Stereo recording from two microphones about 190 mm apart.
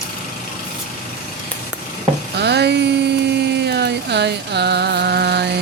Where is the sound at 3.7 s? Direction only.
60° right (ahead or behind).